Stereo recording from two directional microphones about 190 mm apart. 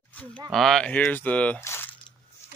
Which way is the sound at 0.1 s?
10° left (ahead or behind).